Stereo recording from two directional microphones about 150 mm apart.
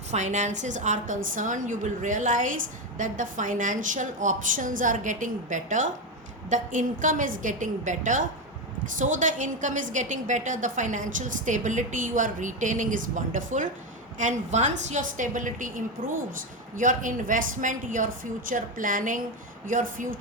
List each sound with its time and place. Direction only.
0.1 s a woman's voice: 50° right (ahead or behind)